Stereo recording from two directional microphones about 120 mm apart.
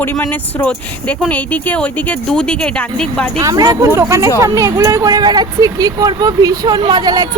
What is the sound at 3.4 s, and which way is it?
Speech, 30° right (ahead or behind).